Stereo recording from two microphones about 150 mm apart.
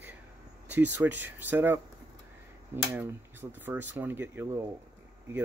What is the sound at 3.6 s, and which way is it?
Speech, 10° right (ahead or behind).